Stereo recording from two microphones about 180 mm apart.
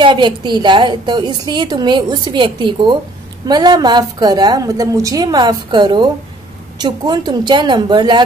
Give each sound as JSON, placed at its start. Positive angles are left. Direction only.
{"t": 0.0, "sound": "a woman's voice", "side_deg": -25}